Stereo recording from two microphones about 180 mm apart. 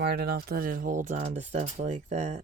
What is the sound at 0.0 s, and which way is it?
Speech, 60° right (ahead or behind).